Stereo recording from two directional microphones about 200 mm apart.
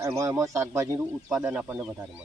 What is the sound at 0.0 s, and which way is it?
A man's voice, 15° right (ahead or behind).